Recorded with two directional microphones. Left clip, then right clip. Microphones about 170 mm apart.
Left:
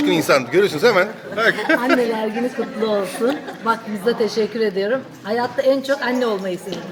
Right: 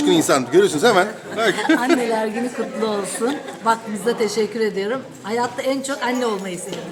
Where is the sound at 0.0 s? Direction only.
25° right (ahead or behind).